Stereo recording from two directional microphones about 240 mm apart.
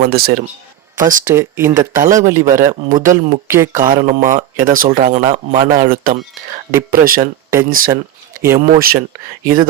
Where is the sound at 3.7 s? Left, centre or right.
Right.